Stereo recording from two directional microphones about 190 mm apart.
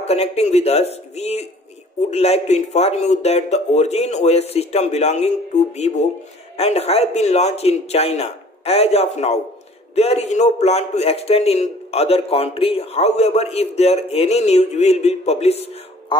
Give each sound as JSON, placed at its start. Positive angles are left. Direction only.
{"t": 0.0, "sound": "a man's voice", "side_deg": 35}